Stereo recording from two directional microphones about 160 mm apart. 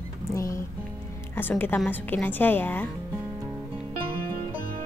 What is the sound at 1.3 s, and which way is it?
A woman's voice, 15° left (ahead or behind).